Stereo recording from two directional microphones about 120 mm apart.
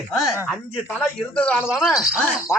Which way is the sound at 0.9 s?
10° left (ahead or behind).